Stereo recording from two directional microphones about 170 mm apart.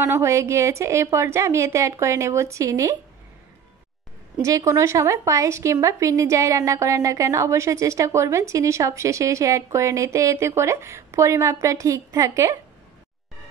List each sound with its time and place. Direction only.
0.0 s speech: 15° right (ahead or behind)
4.4 s speech: 20° right (ahead or behind)